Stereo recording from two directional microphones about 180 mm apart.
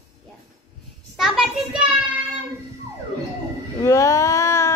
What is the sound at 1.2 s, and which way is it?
Speech, centre (ahead or behind).